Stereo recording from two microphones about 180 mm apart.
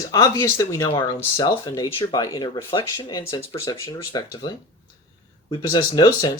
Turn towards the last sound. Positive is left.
turn(degrees=20)  # may be behind; listen again after turning